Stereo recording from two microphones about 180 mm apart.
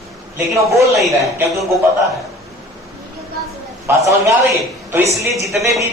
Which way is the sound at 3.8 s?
15° right (ahead or behind).